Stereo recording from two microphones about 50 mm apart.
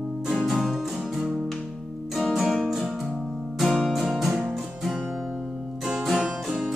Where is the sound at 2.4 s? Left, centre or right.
Centre.